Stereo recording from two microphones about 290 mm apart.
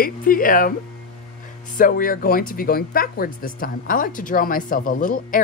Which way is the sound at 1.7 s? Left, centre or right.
Left.